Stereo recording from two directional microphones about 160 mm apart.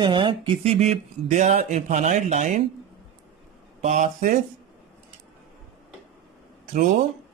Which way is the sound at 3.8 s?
50° right (ahead or behind).